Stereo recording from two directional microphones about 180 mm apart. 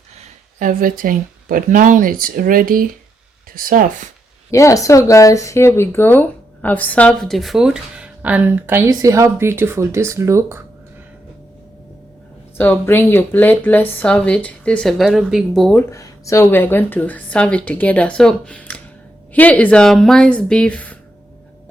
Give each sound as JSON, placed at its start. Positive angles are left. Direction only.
{"t": 0.6, "sound": "speech", "side_deg": -50}
{"t": 4.5, "sound": "speech", "side_deg": 15}
{"t": 12.5, "sound": "speech", "side_deg": 10}
{"t": 15.9, "sound": "speech", "side_deg": 15}